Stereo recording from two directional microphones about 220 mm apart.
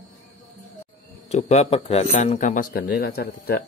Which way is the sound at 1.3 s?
30° left (ahead or behind).